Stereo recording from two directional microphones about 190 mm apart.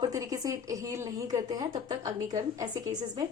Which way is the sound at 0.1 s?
15° right (ahead or behind).